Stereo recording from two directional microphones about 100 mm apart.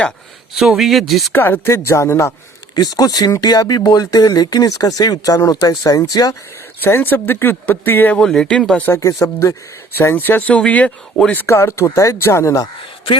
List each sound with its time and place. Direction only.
0.5 s speech: 5° right (ahead or behind)
1.3 s speech: 20° left (ahead or behind)
2.7 s speech: 40° left (ahead or behind)
6.8 s speech: 20° left (ahead or behind)
8.2 s speech: 5° left (ahead or behind)
8.9 s speech: 35° left (ahead or behind)
10.0 s speech: 20° left (ahead or behind)